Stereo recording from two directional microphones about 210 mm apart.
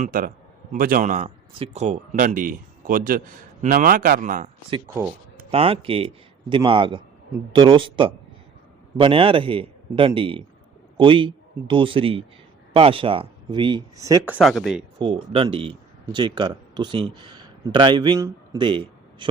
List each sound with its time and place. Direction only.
0.0 s a man's voice: 40° right (ahead or behind); by 14.8 s centre (ahead or behind)
14.9 s a man's voice: 25° right (ahead or behind)